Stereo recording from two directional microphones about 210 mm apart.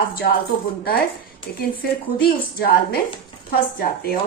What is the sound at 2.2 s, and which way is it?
A woman's voice, 45° left (ahead or behind).